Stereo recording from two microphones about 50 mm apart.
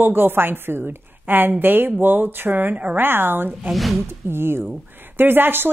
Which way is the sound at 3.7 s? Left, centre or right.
Centre.